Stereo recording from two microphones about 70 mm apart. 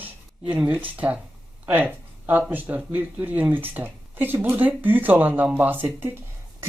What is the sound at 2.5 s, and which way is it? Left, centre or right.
Speech, right.